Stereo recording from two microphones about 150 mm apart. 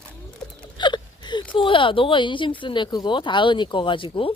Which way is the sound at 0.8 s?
30° left (ahead or behind).